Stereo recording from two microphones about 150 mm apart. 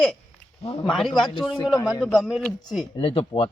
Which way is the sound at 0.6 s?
40° left (ahead or behind).